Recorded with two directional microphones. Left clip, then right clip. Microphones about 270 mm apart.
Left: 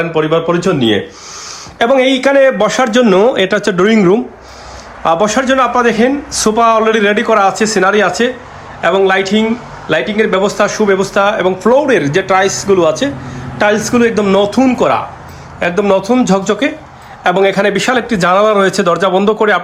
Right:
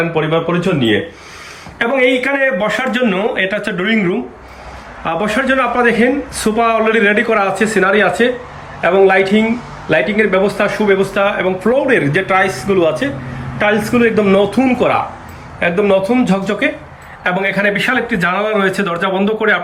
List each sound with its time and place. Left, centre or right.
0.1 s a man's voice: centre
2.6 s a man's voice: centre